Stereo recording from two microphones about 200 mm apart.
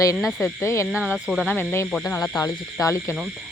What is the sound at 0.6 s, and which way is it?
Speech, 15° left (ahead or behind).